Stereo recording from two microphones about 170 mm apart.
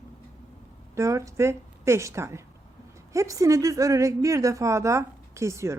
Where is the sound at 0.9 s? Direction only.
20° right (ahead or behind).